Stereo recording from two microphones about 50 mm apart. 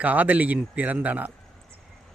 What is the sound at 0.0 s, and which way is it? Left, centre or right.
A man's voice, right.